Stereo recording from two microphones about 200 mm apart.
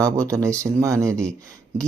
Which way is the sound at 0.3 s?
15° right (ahead or behind).